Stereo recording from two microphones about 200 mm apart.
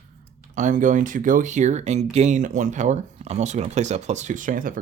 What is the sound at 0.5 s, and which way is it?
Speech, 40° right (ahead or behind).